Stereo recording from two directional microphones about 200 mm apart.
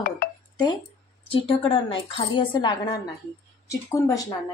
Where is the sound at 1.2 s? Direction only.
25° left (ahead or behind).